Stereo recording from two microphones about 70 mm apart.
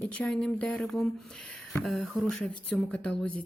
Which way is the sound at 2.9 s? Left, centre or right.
Centre.